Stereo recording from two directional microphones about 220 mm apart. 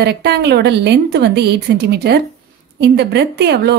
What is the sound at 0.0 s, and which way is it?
A woman's voice, 45° right (ahead or behind).